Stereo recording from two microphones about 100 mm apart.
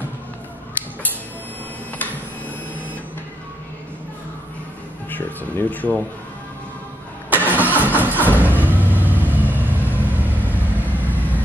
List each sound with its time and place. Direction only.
5.1 s speech: 20° left (ahead or behind)
7.2 s vehicle: 20° right (ahead or behind)
11.1 s vehicle: 15° left (ahead or behind)